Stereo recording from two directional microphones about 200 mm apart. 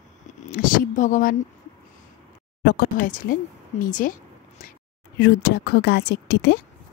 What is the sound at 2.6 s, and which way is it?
Speech, 55° left (ahead or behind).